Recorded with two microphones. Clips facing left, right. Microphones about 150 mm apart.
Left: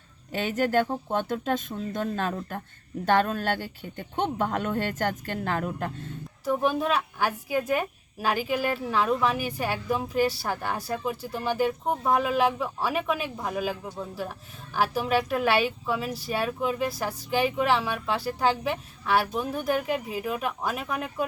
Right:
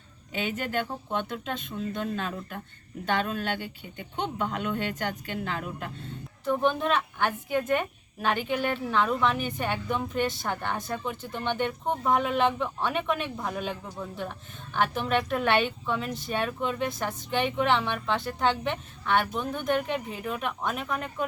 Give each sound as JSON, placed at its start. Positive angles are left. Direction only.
{"t": 0.3, "sound": "speech", "side_deg": 40}
{"t": 6.4, "sound": "a woman's voice", "side_deg": 5}